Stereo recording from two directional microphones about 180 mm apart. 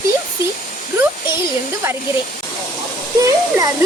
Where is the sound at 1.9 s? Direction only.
15° right (ahead or behind).